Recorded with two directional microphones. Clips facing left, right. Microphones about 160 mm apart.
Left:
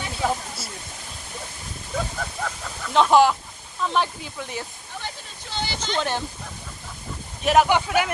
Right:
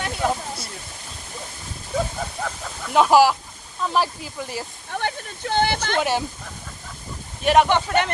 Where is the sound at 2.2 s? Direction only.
15° right (ahead or behind).